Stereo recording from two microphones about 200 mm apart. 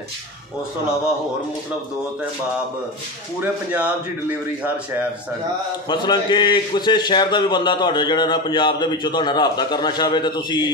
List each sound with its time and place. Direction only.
3.3 s speech: 5° right (ahead or behind)
5.9 s a man's voice: 25° left (ahead or behind)